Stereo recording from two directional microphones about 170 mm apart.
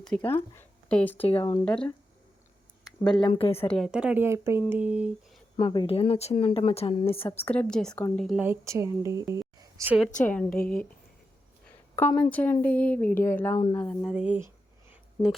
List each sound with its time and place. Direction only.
0.3 s speech: 15° left (ahead or behind)
1.3 s speech: 35° left (ahead or behind)
1.6 s speech: 5° left (ahead or behind)
3.1 s speech: 25° left (ahead or behind)
3.6 s speech: 5° left (ahead or behind)
3.9 s speech: 10° right (ahead or behind)
5.5 s speech: 30° left (ahead or behind)
7.4 s speech: 5° left (ahead or behind)
8.4 s speech: 15° right (ahead or behind)
9.6 s a sound: 20° right (ahead or behind)
10.2 s speech: 10° left (ahead or behind)
12.0 s a woman's voice: 10° left (ahead or behind)
14.0 s speech: 5° right (ahead or behind)
14.8 s a sound: centre (ahead or behind)